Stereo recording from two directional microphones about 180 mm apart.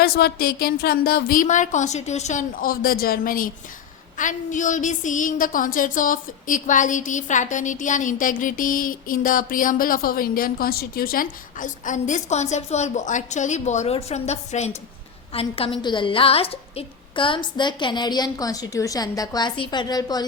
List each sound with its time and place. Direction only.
0.0 s a woman's voice: 60° left (ahead or behind); by 20.2 s 20° left (ahead or behind)